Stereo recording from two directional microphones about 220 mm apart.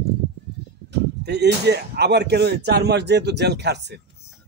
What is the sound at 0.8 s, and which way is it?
Speech, 50° right (ahead or behind).